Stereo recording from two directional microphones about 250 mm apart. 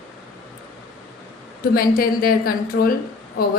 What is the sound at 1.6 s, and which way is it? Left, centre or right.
A woman's voice, left.